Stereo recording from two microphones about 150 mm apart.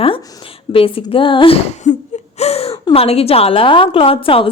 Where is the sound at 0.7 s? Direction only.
35° left (ahead or behind).